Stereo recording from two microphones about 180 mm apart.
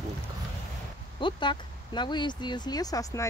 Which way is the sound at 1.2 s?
25° left (ahead or behind).